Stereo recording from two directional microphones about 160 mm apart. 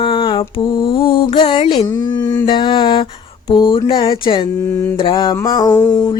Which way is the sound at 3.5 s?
35° left (ahead or behind).